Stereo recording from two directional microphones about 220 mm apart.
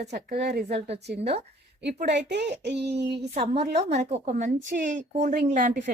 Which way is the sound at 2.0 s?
50° right (ahead or behind).